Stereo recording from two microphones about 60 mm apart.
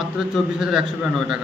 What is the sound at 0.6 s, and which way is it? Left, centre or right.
Speech, centre.